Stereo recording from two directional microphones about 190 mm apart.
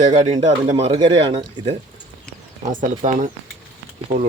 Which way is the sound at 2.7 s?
40° right (ahead or behind).